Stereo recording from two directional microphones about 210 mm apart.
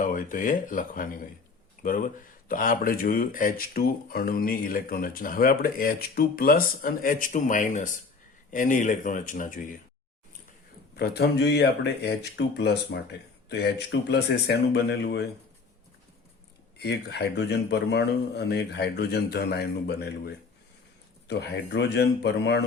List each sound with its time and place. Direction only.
0.0 s speech: 40° left (ahead or behind)
10.9 s speech: 50° left (ahead or behind)
16.7 s speech: 50° left (ahead or behind)